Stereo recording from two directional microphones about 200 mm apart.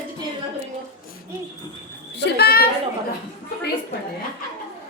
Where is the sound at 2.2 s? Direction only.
50° left (ahead or behind).